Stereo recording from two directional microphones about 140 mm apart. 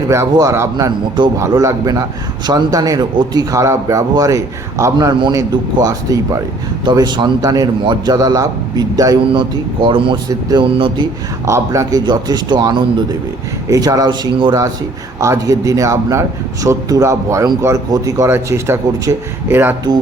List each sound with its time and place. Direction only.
0.1 s a man's voice: 20° right (ahead or behind)
11.4 s a man's voice: 20° right (ahead or behind)
15.2 s a man's voice: 20° right (ahead or behind)